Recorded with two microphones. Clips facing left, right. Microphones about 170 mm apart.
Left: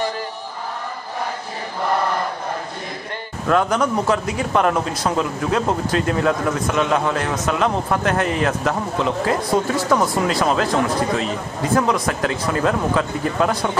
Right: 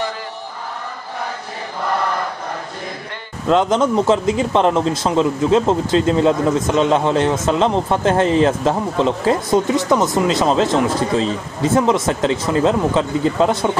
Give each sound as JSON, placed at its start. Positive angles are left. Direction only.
{"t": 3.4, "sound": "speech", "side_deg": -20}